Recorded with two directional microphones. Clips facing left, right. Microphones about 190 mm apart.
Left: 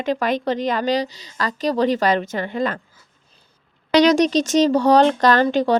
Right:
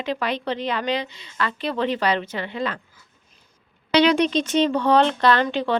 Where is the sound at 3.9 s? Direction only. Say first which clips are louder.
Left 3 dB; 40° left (ahead or behind).